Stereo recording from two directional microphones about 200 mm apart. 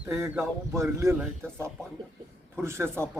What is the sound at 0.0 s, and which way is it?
A man's voice, 15° right (ahead or behind).